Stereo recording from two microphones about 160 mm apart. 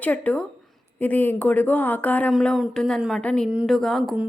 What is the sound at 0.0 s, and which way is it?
Speech, 10° left (ahead or behind).